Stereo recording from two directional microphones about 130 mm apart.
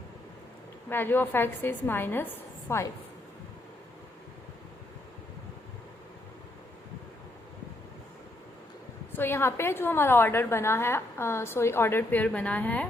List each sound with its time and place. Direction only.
0.9 s a woman's voice: 15° left (ahead or behind)
9.1 s a woman's voice: 20° left (ahead or behind)